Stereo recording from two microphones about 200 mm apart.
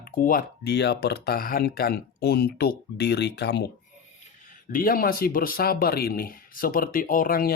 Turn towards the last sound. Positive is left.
turn(degrees=45)  # may be behind; listen again after turning